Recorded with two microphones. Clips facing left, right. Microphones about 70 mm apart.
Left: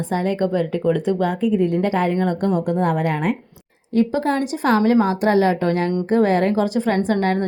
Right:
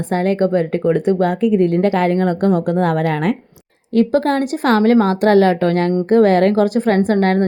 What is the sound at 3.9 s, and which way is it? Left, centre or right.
Speech, right.